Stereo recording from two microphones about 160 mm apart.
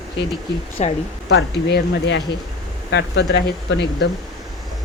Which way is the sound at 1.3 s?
90° left.